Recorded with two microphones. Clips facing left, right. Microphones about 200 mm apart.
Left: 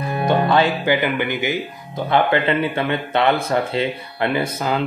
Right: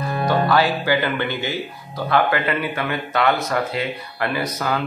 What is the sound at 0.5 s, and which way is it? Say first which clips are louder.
Music: left 1 dB; 25° left (ahead or behind).